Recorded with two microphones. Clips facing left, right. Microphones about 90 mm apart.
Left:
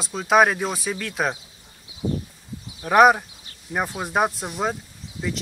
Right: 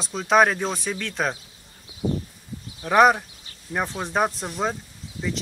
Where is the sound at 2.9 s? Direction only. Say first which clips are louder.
Left 2 dB; 5° left (ahead or behind).